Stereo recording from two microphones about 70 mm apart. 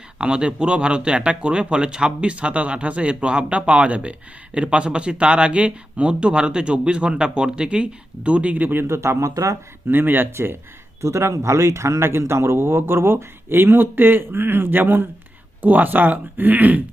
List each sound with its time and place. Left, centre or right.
0.2 s speech: centre; by 9.6 s right
9.9 s speech: right